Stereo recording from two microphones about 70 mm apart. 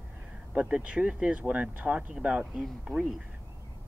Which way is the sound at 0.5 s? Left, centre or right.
Centre.